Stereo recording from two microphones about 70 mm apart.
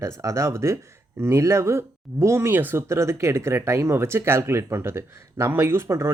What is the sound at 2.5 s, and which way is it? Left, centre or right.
Speech, right.